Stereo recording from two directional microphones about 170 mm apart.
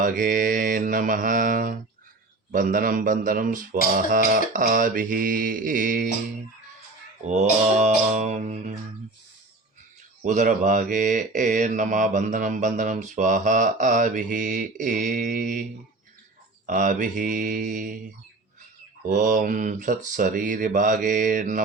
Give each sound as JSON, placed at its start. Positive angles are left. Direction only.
{"t": 0.0, "sound": "speech", "side_deg": -50}
{"t": 7.3, "sound": "speech", "side_deg": -45}
{"t": 10.2, "sound": "speech", "side_deg": -45}
{"t": 16.6, "sound": "speech", "side_deg": -50}
{"t": 19.0, "sound": "speech", "side_deg": -45}